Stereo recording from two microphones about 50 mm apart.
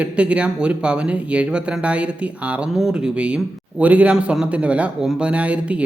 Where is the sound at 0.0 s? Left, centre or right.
Right.